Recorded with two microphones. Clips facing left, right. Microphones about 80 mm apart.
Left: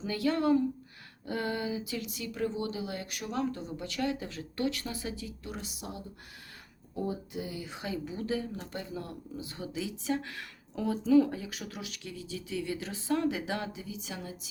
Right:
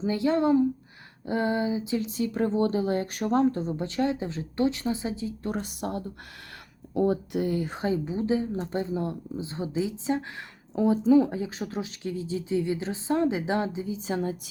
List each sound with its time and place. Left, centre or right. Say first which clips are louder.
0.0 s speech: right 5 dB; right
5.5 s speech: right 11 dB; right
6.9 s speech: right 10 dB; right
8.0 s speech: right 7 dB; right